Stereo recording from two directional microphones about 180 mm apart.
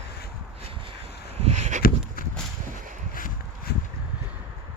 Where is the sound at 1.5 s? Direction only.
40° right (ahead or behind).